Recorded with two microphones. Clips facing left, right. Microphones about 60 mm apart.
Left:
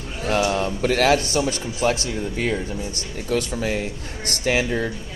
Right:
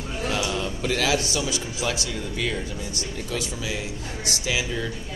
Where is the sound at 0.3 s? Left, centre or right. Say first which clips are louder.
Left 7 dB; left.